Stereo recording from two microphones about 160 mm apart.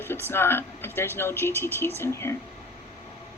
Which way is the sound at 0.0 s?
15° left (ahead or behind).